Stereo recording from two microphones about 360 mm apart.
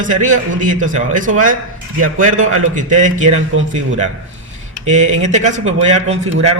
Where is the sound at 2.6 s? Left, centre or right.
Right.